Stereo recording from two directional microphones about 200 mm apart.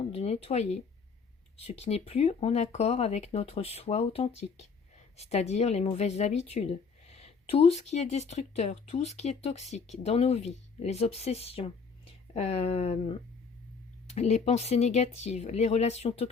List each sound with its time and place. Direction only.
0.1 s speech: 30° left (ahead or behind)